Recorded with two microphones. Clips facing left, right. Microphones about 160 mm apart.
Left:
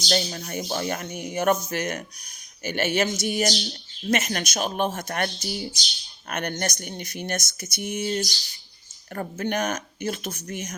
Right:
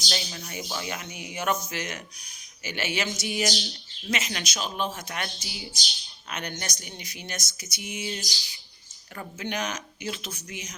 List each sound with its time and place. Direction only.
0.1 s speech: 45° left (ahead or behind)